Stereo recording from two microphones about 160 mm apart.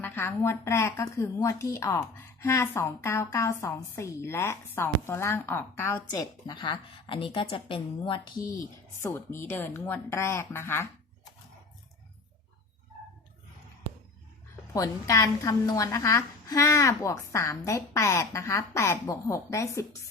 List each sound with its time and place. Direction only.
0.0 s a woman's voice: 15° left (ahead or behind)
6.5 s a woman's voice: 30° left (ahead or behind)
14.7 s a woman's voice: 20° left (ahead or behind)